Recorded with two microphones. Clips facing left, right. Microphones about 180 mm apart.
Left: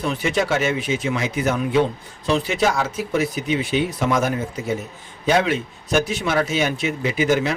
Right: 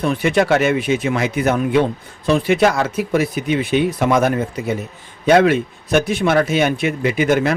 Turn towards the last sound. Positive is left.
turn(degrees=-60)  # may be behind; listen again after turning